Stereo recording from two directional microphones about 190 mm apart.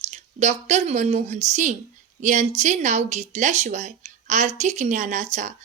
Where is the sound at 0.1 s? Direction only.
40° right (ahead or behind).